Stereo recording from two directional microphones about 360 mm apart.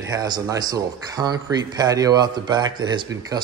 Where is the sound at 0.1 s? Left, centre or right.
Centre.